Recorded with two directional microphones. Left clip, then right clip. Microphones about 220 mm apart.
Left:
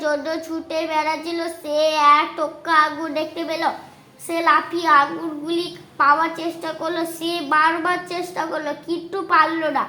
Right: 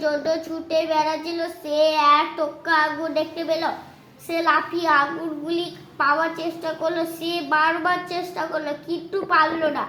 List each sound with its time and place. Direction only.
0.0 s a woman's voice: 30° left (ahead or behind)